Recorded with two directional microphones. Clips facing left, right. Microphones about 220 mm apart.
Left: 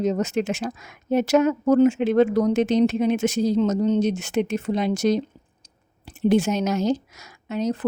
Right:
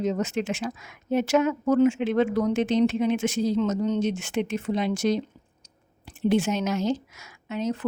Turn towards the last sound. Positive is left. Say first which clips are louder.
# left 3 dB
turn(degrees=40)  # may be behind; listen again after turning